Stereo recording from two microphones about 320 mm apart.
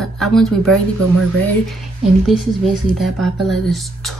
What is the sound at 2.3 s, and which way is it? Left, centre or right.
Speech, centre.